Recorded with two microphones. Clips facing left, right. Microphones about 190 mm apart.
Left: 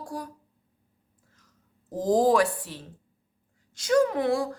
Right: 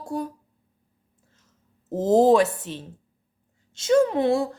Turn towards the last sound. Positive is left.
turn(degrees=-25)  # may be behind; listen again after turning